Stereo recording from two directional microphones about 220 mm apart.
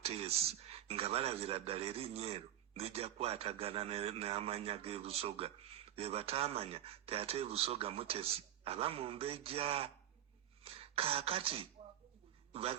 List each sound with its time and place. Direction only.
0.0 s speech: 25° right (ahead or behind)